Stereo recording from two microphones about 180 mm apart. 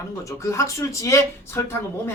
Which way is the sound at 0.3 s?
15° left (ahead or behind).